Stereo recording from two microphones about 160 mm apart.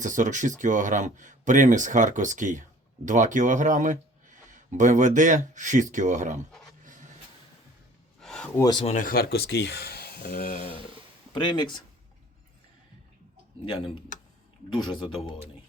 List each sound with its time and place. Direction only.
0.0 s speech: 50° right (ahead or behind)
8.2 s a sound: 5° left (ahead or behind)
8.5 s speech: 20° left (ahead or behind)
8.8 s speech: 50° left (ahead or behind); by 10.6 s 70° left (ahead or behind)
11.3 s speech: 30° left (ahead or behind)